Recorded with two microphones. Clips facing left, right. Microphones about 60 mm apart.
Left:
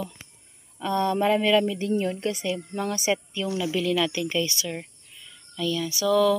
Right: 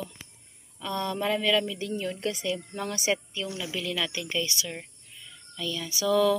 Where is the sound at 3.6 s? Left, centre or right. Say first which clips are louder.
Left 8 dB; centre.